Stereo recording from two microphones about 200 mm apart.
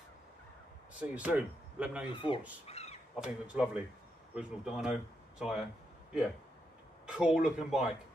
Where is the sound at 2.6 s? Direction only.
30° left (ahead or behind).